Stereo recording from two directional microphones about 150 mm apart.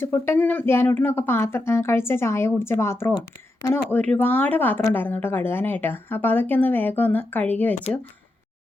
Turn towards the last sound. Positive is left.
turn(degrees=10)  # may be behind; listen again after turning